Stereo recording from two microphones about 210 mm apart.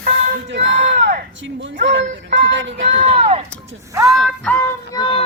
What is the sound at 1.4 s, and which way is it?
Speech, 65° right (ahead or behind).